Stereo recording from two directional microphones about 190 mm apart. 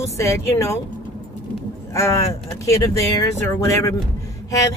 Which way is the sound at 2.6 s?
15° left (ahead or behind).